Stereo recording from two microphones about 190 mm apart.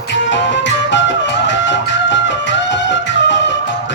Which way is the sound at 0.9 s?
70° left (ahead or behind).